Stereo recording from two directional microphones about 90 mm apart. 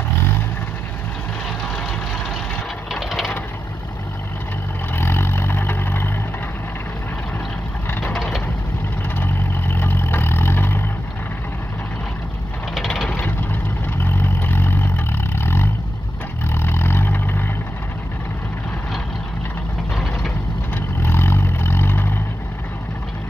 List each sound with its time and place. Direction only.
2.9 s ratchet: 5° right (ahead or behind)
4.9 s vehicle: 25° left (ahead or behind)
9.1 s vehicle: 25° left (ahead or behind)
12.7 s vehicle: centre (ahead or behind)
13.1 s vehicle: 20° left (ahead or behind)
20.7 s vehicle: 25° left (ahead or behind)